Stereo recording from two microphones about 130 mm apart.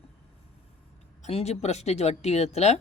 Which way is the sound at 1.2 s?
55° left (ahead or behind).